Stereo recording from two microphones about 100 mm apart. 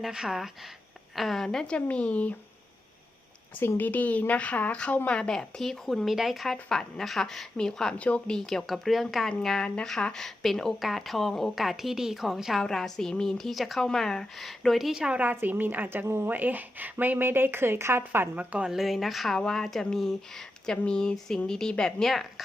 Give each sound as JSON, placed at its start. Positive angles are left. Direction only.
{"t": 0.0, "sound": "speech", "side_deg": -5}
{"t": 3.6, "sound": "speech", "side_deg": 20}
{"t": 18.7, "sound": "speech", "side_deg": 0}